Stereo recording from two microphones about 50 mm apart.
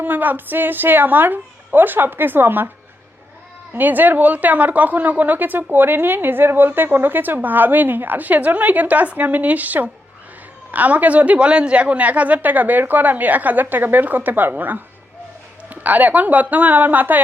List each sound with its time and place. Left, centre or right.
0.0 s a woman's voice: right
3.7 s a woman's voice: right